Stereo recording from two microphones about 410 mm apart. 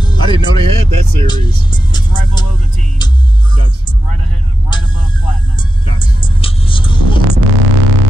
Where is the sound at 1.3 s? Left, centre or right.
Centre.